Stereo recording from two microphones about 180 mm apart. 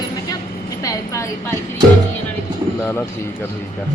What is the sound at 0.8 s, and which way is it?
Speech, 20° left (ahead or behind).